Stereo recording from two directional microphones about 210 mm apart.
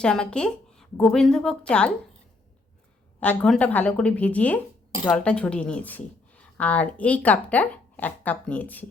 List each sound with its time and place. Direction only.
0.0 s a woman's voice: 5° left (ahead or behind)
3.2 s a woman's voice: 5° left (ahead or behind)